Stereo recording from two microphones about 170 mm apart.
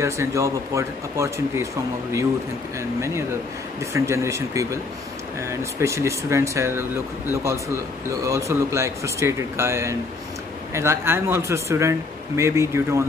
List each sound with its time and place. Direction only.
0.0 s speech: 15° right (ahead or behind)
3.0 s speech: 15° right (ahead or behind)